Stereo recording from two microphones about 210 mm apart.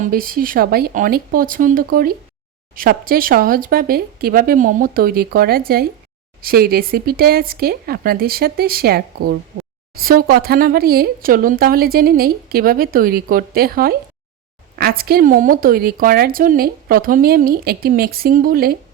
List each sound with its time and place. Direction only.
0.0 s a woman's voice: 45° right (ahead or behind)